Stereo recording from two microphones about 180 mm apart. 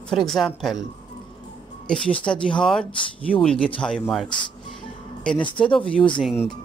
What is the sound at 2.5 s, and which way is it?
Speech, 5° left (ahead or behind).